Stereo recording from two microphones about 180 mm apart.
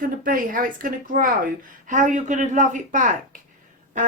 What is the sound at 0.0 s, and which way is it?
Speech, 50° right (ahead or behind).